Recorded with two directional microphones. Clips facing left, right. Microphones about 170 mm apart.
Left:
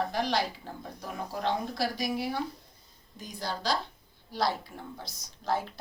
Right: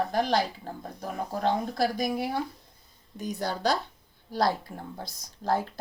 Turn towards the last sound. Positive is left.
turn(degrees=-45)  # may be behind; listen again after turning